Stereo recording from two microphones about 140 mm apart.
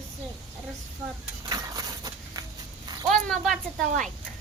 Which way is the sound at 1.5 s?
25° right (ahead or behind).